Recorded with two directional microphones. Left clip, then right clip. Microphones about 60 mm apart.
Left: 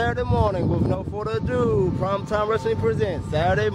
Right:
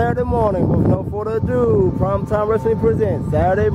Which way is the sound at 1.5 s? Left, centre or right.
Left.